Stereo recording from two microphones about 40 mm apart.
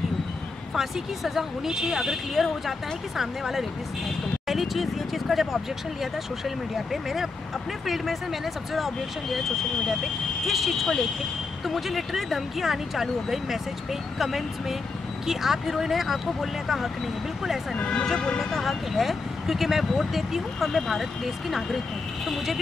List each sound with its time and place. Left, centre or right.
0.7 s speech: centre
10.4 s speech: centre
18.1 s speech: centre
18.4 s speech: centre